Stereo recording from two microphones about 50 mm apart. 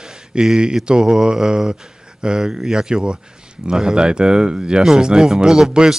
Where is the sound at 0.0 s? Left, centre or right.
Centre.